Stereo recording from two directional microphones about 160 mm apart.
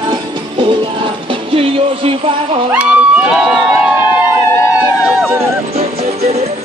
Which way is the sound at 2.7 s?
5° right (ahead or behind).